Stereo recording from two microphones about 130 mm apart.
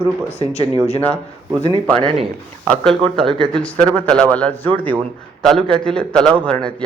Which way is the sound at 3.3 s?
5° left (ahead or behind).